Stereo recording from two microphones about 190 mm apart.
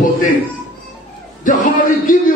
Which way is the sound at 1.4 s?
45° left (ahead or behind).